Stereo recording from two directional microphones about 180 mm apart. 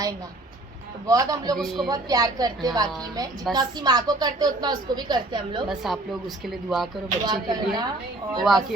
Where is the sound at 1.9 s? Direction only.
20° right (ahead or behind).